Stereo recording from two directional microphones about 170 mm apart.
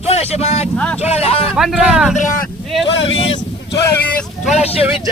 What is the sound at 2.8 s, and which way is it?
Speech, 90° left.